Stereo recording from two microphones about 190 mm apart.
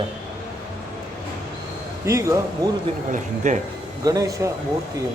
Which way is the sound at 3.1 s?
40° right (ahead or behind).